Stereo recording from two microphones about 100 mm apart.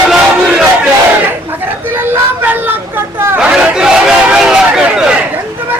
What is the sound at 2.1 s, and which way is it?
Vehicle, 20° right (ahead or behind).